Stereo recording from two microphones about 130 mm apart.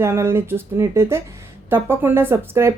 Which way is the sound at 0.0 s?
20° right (ahead or behind).